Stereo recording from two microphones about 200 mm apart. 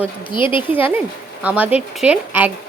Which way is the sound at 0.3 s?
25° left (ahead or behind).